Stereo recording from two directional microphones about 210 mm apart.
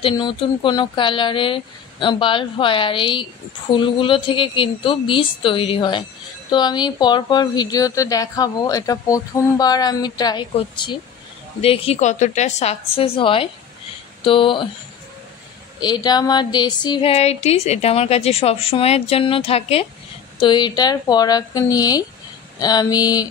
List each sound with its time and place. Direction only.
0.0 s a woman's voice: 25° left (ahead or behind)
15.8 s a woman's voice: 20° left (ahead or behind)